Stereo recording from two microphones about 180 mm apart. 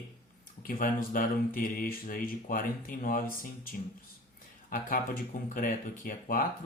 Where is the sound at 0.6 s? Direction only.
50° left (ahead or behind).